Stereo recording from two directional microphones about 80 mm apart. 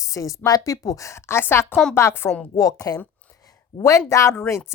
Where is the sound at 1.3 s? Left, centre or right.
Left.